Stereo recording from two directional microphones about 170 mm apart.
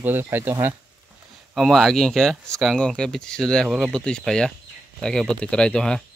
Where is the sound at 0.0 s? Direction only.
10° right (ahead or behind).